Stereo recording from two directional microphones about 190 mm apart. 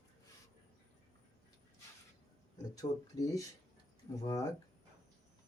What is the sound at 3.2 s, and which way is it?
Speech, 15° left (ahead or behind).